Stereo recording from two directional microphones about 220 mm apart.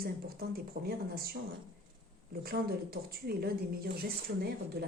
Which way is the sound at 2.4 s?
45° right (ahead or behind).